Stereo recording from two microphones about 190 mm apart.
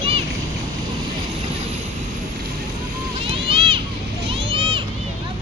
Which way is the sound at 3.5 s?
30° right (ahead or behind).